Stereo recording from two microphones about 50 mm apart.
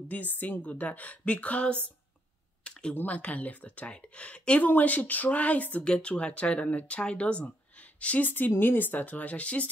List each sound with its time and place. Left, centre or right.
0.1 s a woman's voice: left
2.6 s a sound: centre
3.1 s a woman's voice: left
4.6 s speech: left
5.9 s a woman's voice: left
8.3 s speech: left